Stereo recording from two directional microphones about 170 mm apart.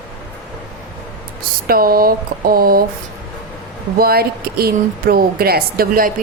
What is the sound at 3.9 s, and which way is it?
Speech, 65° right (ahead or behind).